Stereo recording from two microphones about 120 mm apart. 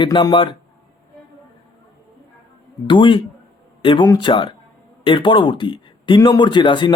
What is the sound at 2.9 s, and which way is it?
Speech, 45° left (ahead or behind).